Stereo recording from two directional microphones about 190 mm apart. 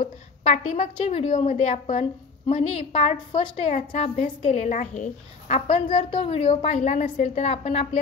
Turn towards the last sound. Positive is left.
turn(degrees=35)  # may be behind; listen again after turning